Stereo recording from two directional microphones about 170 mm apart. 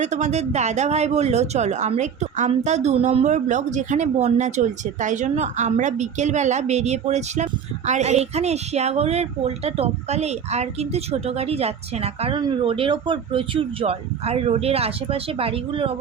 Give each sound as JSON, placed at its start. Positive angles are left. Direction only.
{"t": 0.0, "sound": "a woman's voice", "side_deg": -45}